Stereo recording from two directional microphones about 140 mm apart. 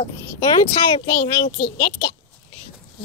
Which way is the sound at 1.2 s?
75° left (ahead or behind).